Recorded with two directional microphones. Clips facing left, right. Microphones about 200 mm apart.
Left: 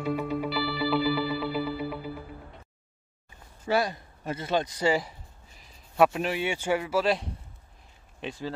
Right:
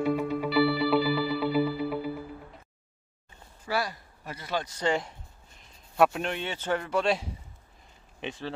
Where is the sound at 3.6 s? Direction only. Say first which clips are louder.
Left 5 dB; 25° left (ahead or behind).